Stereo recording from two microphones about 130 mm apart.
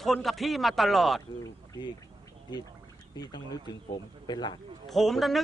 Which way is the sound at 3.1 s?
30° left (ahead or behind).